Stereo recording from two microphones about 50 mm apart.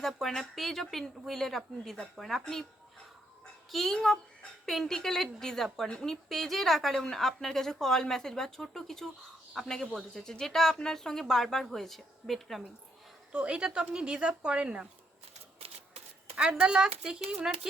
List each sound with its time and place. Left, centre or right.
0.2 s a woman's voice: centre
3.7 s a woman's voice: centre
13.3 s speech: right
16.4 s speech: centre